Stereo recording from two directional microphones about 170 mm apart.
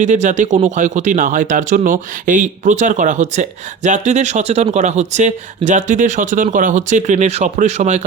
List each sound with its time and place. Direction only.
0.0 s speech: 45° right (ahead or behind)